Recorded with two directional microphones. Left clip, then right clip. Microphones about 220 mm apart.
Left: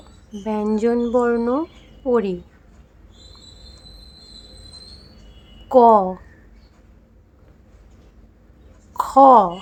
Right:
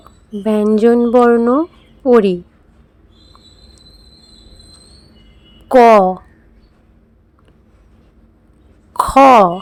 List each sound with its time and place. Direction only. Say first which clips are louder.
0.4 s speech: right 9 dB; 30° right (ahead or behind)
5.6 s speech: right 5 dB; 30° right (ahead or behind)
8.9 s a sound: right 3 dB; 30° right (ahead or behind)